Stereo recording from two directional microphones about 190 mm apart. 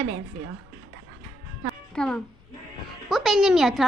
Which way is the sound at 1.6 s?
5° left (ahead or behind).